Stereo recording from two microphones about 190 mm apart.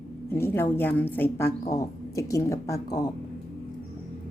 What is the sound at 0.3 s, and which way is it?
Speech, 10° left (ahead or behind).